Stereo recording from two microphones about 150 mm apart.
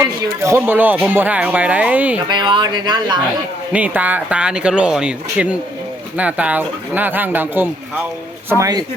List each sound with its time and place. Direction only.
0.0 s speech: 20° right (ahead or behind)
2.2 s speech: 30° right (ahead or behind)
3.7 s speech: 10° right (ahead or behind)